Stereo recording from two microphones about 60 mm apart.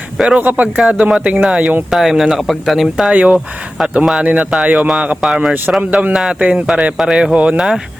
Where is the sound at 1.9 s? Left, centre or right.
Centre.